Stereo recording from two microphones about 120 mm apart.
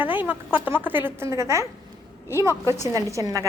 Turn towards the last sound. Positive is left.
turn(degrees=-30)  # may be behind; listen again after turning